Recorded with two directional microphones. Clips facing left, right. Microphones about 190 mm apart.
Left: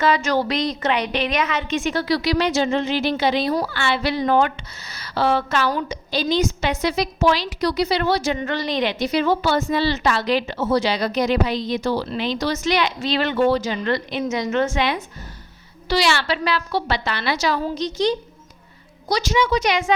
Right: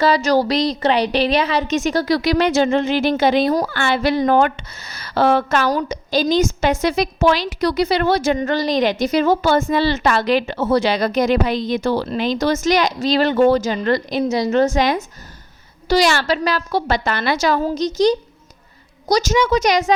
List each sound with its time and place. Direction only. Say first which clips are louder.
0.0 s a woman's voice: right 4 dB; 35° right (ahead or behind)